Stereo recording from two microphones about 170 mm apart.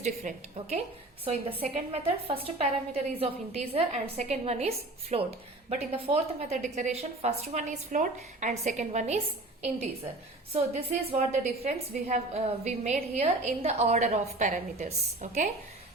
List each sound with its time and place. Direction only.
0.0 s a woman's voice: 40° right (ahead or behind)
11.1 s a woman's voice: 40° right (ahead or behind)